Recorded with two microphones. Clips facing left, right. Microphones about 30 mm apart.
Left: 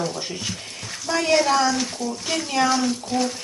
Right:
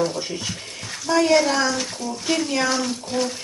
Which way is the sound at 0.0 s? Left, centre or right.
Centre.